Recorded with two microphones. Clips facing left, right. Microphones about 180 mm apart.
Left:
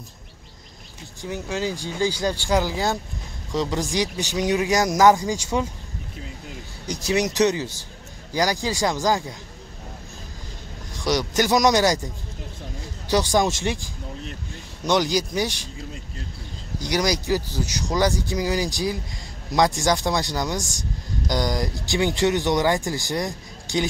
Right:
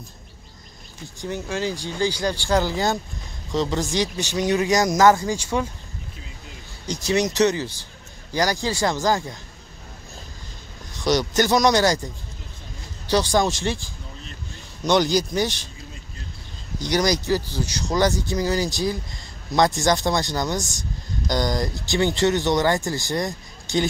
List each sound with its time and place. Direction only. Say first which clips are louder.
1.2 s speech: right 1 dB; 10° left (ahead or behind)
6.9 s speech: right 1 dB; 10° left (ahead or behind)
11.1 s speech: right 1 dB; 10° left (ahead or behind)
13.3 s speech: even; 20° left (ahead or behind)
14.9 s speech: right 2 dB; 10° left (ahead or behind)
16.8 s speech: right 2 dB; 10° left (ahead or behind)